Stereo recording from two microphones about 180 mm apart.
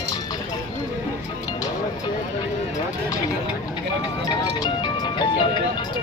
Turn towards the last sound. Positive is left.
turn(degrees=25)  # may be behind; listen again after turning